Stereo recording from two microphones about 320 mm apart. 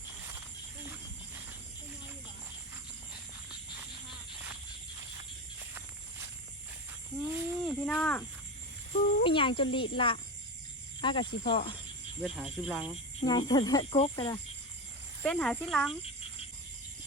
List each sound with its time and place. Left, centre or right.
7.3 s cricket: centre
9.2 s speech: centre
12.2 s speech: centre
13.1 s speech: centre
15.2 s speech: centre